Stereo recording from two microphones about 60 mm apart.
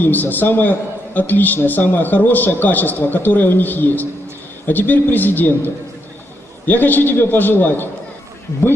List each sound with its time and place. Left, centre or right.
0.0 s a man's voice: left